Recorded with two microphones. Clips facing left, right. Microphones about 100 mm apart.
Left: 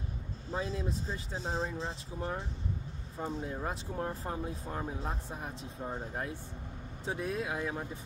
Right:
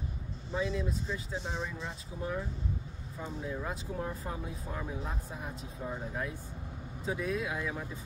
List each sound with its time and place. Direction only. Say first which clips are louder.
0.5 s speech: right 2 dB; 40° left (ahead or behind)
3.5 s speech: even; 30° left (ahead or behind)